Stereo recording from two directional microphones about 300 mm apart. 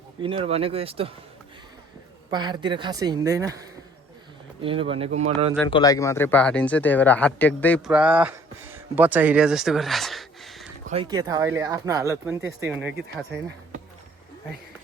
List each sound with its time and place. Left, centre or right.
0.2 s speech: centre
2.3 s speech: centre
4.6 s speech: centre
5.5 s speech: centre
10.8 s speech: centre